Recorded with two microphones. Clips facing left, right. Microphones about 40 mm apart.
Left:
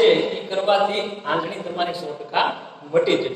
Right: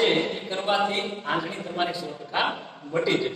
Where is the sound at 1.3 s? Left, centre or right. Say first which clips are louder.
Left 5 dB; centre.